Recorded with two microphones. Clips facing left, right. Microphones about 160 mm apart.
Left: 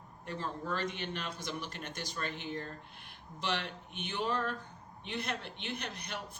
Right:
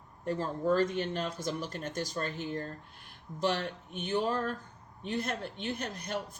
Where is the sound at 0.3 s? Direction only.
40° right (ahead or behind).